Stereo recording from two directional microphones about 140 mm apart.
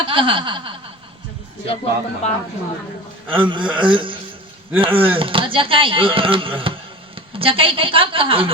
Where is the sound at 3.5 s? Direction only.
35° right (ahead or behind).